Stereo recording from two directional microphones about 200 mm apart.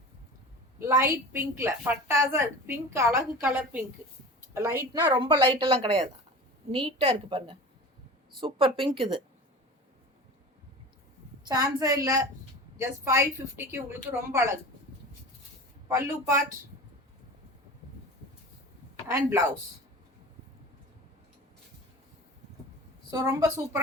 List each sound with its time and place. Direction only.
1.1 s a woman's voice: 15° right (ahead or behind)
5.2 s speech: 25° right (ahead or behind)
11.4 s a woman's voice: 20° right (ahead or behind)
15.9 s a woman's voice: 15° right (ahead or behind)
19.0 s a woman's voice: 15° right (ahead or behind)
23.1 s a woman's voice: 15° right (ahead or behind)